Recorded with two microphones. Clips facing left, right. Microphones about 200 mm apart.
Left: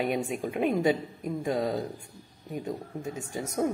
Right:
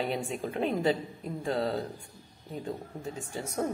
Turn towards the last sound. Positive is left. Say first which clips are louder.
# left 3 dB
turn(degrees=10)  # may be behind; listen again after turning